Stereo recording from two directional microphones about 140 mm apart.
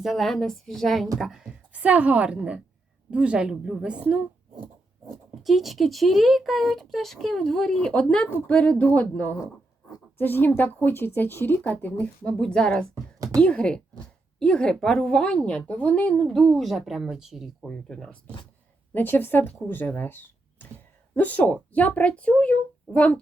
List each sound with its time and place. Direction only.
0.0 s a woman's voice: centre (ahead or behind)
5.3 s a woman's voice: centre (ahead or behind)
12.9 s a sound: 25° right (ahead or behind)
13.4 s a woman's voice: 5° left (ahead or behind)